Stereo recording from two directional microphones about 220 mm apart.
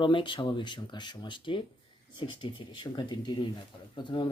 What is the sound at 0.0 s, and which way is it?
Speech, 20° left (ahead or behind).